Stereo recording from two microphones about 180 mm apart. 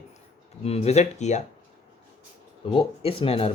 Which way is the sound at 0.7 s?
35° left (ahead or behind).